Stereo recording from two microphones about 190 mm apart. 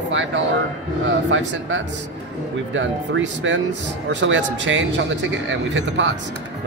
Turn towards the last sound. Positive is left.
turn(degrees=-75)  # may be behind; listen again after turning